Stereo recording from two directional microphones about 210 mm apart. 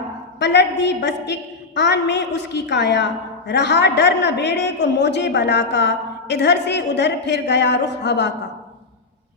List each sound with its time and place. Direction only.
0.3 s a woman's voice: 55° left (ahead or behind)